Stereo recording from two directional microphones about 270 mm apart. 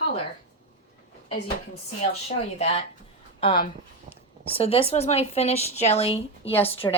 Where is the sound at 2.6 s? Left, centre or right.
Left.